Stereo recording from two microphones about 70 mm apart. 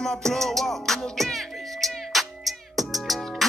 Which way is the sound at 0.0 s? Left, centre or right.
Centre.